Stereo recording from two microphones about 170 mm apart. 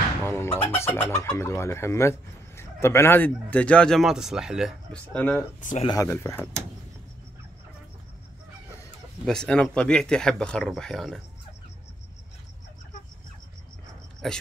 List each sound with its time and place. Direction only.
0.2 s music: 15° left (ahead or behind)
1.1 s a man's voice: 15° left (ahead or behind); by 5.0 s 5° right (ahead or behind)
5.1 s a man's voice: 10° left (ahead or behind)
5.6 s speech: 45° left (ahead or behind)
5.9 s a man's voice: 15° left (ahead or behind)
9.2 s speech: 5° left (ahead or behind)
14.2 s speech: centre (ahead or behind)